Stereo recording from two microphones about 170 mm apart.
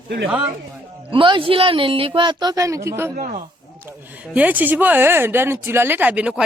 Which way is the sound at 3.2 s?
45° right (ahead or behind).